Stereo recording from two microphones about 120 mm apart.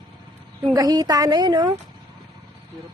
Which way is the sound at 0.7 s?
35° right (ahead or behind).